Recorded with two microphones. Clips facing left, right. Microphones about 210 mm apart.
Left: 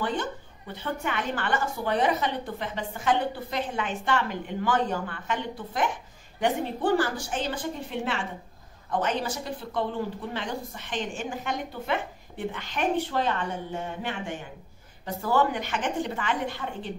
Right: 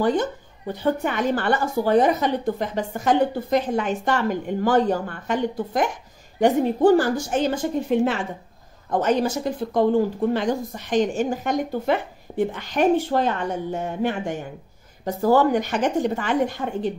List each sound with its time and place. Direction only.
0.0 s a woman's voice: 40° right (ahead or behind)
15.0 s a woman's voice: 40° right (ahead or behind)